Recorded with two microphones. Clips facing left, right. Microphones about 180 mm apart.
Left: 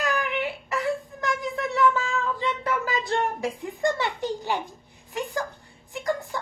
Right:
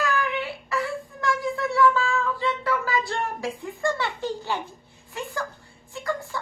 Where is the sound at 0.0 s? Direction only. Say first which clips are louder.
Even; 20° left (ahead or behind).